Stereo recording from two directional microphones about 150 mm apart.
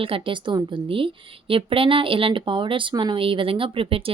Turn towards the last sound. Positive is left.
turn(degrees=-40)  # may be behind; listen again after turning